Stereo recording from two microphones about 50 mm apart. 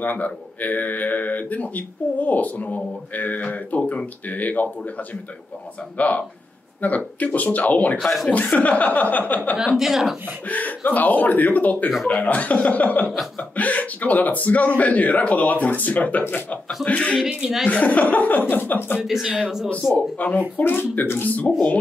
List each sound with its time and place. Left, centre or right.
0.0 s speech: left
5.9 s speech: left
8.0 s speech: centre
8.3 s speech: left
9.8 s speech: centre
10.5 s speech: left
17.3 s speech: centre
17.6 s speech: left
19.0 s speech: centre
20.2 s speech: left
20.6 s speech: left